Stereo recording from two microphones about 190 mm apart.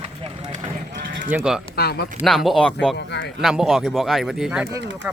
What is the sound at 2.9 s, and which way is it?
Speech, 65° left (ahead or behind).